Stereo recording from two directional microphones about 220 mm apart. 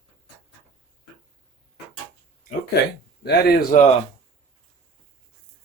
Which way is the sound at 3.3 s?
45° left (ahead or behind).